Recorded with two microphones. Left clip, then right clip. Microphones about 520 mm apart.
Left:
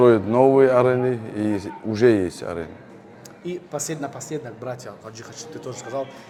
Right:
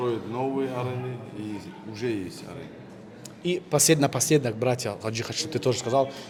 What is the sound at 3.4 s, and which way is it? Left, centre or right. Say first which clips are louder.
Speech: right 7 dB; right.